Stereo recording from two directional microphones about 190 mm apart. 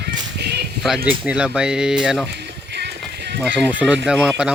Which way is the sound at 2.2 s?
60° right (ahead or behind).